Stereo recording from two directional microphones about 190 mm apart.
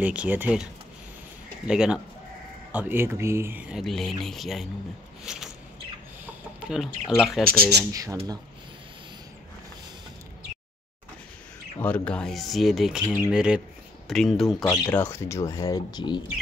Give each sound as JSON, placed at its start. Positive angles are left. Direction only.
{"t": 0.0, "sound": "speech", "side_deg": -5}
{"t": 1.7, "sound": "speech", "side_deg": -5}
{"t": 5.2, "sound": "a sound", "side_deg": 0}
{"t": 6.6, "sound": "speech", "side_deg": -5}
{"t": 7.9, "sound": "speech", "side_deg": -20}
{"t": 11.8, "sound": "speech", "side_deg": 5}
{"t": 14.6, "sound": "speech", "side_deg": 15}